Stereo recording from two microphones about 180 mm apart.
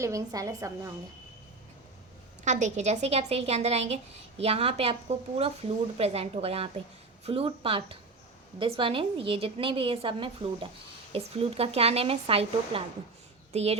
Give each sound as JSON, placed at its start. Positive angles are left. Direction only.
{"t": 0.0, "sound": "a woman's voice", "side_deg": -20}
{"t": 2.4, "sound": "a woman's voice", "side_deg": -40}